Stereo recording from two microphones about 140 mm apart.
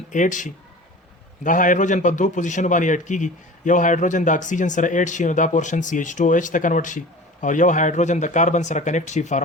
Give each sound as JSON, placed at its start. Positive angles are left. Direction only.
{"t": 0.1, "sound": "a man's voice", "side_deg": 65}